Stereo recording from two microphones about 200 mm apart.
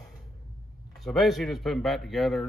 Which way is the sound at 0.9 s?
Centre (ahead or behind).